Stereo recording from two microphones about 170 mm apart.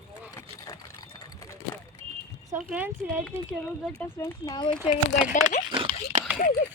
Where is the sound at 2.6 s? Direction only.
5° right (ahead or behind).